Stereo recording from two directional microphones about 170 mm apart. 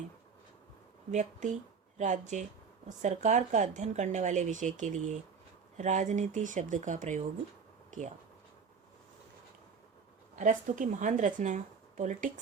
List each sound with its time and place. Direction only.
1.1 s a woman's voice: 45° right (ahead or behind)
7.9 s a sound: 50° right (ahead or behind)
10.3 s a woman's voice: 50° right (ahead or behind)